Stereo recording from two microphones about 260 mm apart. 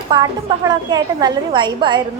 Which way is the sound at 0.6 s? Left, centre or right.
Centre.